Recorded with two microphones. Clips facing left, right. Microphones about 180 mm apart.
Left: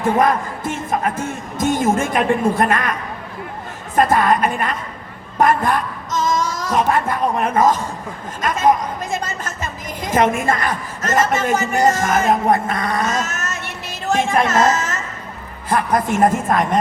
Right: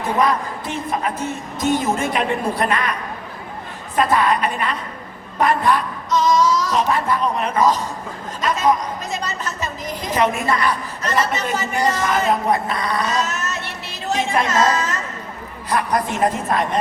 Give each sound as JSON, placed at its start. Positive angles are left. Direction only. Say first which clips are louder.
{"t": 0.2, "sound": "a man's voice", "louder": "left 2 dB", "side_deg": 50}
{"t": 3.9, "sound": "a man's voice", "louder": "left 2 dB", "side_deg": 45}
{"t": 14.1, "sound": "a sound", "louder": "left 3 dB", "side_deg": 50}
{"t": 16.1, "sound": "a man's voice", "louder": "left 6 dB", "side_deg": 50}